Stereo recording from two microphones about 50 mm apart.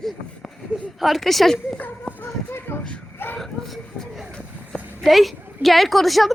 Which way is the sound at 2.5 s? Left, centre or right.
Left.